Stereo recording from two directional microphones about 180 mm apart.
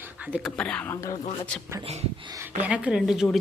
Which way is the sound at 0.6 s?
5° left (ahead or behind).